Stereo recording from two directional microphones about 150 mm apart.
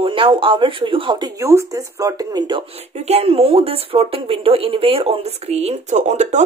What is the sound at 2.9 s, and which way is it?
Speech, 45° right (ahead or behind).